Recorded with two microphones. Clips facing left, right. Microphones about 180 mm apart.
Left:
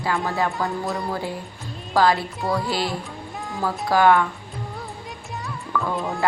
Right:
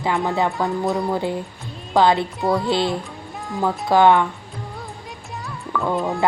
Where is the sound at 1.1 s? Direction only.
20° right (ahead or behind).